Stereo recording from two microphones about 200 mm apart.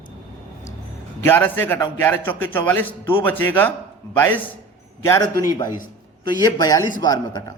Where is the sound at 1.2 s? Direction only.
10° left (ahead or behind).